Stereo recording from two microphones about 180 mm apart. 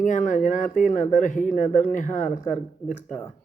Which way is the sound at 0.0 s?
45° left (ahead or behind).